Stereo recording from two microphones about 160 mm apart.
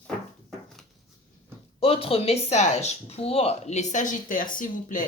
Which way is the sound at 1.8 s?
35° left (ahead or behind).